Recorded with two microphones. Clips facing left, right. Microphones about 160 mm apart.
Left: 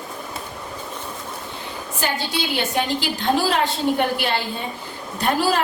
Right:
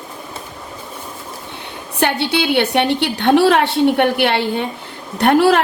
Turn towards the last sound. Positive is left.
turn(degrees=-65)  # may be behind; listen again after turning